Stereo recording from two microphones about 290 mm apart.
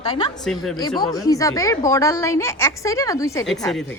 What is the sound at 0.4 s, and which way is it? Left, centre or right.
Speech, centre.